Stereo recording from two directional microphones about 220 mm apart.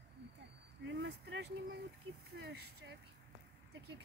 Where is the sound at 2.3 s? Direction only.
50° right (ahead or behind).